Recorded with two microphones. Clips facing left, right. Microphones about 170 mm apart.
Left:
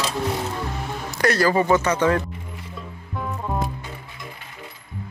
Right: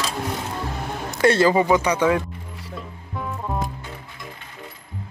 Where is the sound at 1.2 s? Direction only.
25° right (ahead or behind).